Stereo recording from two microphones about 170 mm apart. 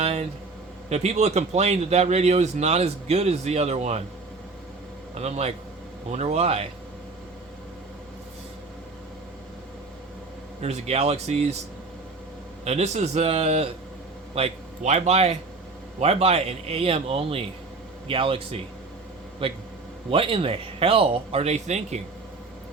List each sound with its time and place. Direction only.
0.0 s speech: 40° right (ahead or behind)
5.1 s speech: 40° right (ahead or behind)
10.6 s speech: 40° right (ahead or behind)
12.6 s speech: 40° right (ahead or behind)